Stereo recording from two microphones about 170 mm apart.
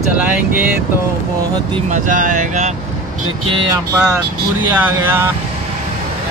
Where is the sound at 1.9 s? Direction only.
50° right (ahead or behind).